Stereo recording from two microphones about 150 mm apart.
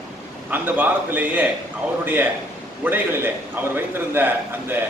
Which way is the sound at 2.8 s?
15° right (ahead or behind).